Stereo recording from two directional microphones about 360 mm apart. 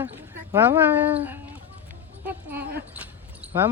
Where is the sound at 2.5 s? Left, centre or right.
Right.